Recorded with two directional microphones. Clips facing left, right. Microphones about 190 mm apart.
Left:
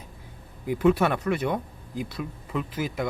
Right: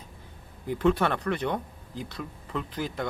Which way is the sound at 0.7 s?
10° left (ahead or behind).